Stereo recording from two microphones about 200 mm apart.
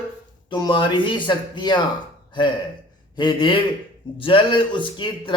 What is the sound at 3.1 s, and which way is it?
Speech, 25° left (ahead or behind).